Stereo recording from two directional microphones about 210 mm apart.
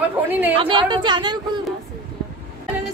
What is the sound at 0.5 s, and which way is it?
Speech, 25° right (ahead or behind).